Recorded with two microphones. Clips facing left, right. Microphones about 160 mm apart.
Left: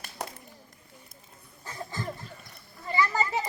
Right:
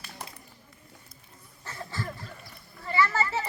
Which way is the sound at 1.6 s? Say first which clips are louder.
Left 1 dB; 15° left (ahead or behind).